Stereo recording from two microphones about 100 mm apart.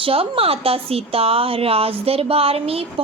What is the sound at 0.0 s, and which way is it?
A woman's voice, 70° right (ahead or behind).